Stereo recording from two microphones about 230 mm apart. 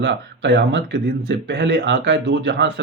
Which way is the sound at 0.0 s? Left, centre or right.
Right.